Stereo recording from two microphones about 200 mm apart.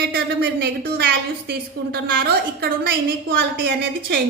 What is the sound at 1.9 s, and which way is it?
A woman's voice, 45° right (ahead or behind).